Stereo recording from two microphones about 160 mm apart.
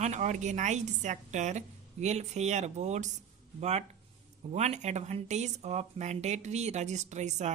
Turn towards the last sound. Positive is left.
turn(degrees=-45)  # may be behind; listen again after turning